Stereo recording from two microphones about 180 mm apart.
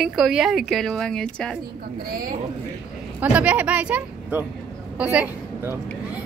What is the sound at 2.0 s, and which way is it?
Speech, 55° right (ahead or behind).